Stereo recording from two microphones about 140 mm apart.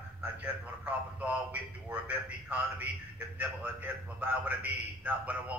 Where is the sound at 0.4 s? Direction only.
10° right (ahead or behind).